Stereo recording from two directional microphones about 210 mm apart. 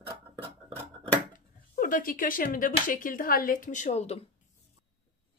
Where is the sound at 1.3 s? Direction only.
40° left (ahead or behind).